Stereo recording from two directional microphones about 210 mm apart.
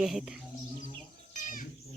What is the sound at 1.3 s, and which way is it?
Goat, 40° left (ahead or behind).